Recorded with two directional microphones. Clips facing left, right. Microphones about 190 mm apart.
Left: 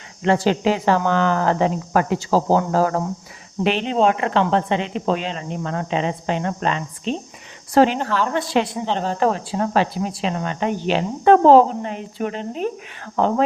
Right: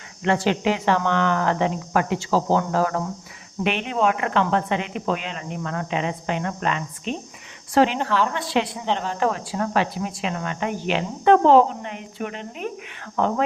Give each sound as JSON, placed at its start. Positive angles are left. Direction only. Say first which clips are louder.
{"t": 0.3, "sound": "a woman's voice", "louder": "left 3 dB", "side_deg": 35}